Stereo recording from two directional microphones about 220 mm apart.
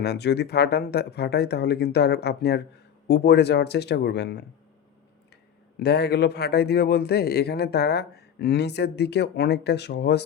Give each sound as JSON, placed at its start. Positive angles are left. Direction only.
{"t": 0.0, "sound": "speech", "side_deg": 50}
{"t": 5.8, "sound": "speech", "side_deg": 50}